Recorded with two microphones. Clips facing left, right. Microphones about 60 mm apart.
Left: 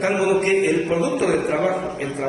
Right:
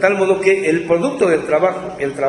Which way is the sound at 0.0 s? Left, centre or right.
Right.